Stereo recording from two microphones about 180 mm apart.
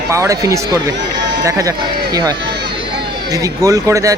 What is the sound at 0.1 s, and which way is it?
Speech, 15° right (ahead or behind).